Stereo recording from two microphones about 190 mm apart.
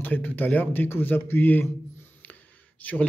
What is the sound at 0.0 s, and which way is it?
A man's voice, 10° left (ahead or behind).